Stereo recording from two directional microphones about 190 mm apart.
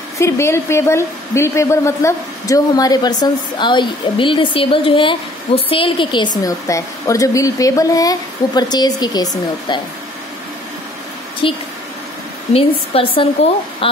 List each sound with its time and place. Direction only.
0.2 s a woman's voice: 15° left (ahead or behind)
11.4 s a woman's voice: 25° left (ahead or behind)